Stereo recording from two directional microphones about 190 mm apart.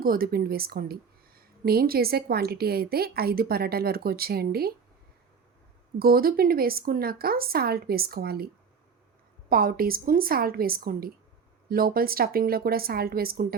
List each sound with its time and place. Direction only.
0.0 s a woman's voice: 50° right (ahead or behind)
6.0 s a woman's voice: 50° right (ahead or behind)
9.5 s a woman's voice: 50° right (ahead or behind)